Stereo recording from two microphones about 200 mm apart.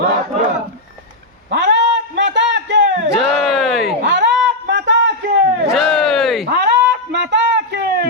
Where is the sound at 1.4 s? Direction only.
60° right (ahead or behind).